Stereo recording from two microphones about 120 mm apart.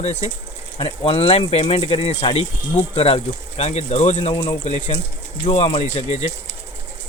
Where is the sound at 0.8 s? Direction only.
55° left (ahead or behind).